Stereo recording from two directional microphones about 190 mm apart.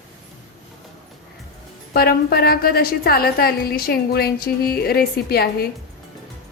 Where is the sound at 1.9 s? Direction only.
55° left (ahead or behind).